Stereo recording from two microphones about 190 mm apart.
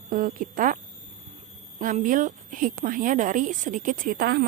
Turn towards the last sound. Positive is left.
turn(degrees=-55)  # may be behind; listen again after turning